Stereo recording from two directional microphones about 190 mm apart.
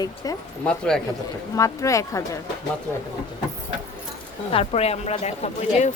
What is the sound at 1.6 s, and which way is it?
Speech, 15° left (ahead or behind).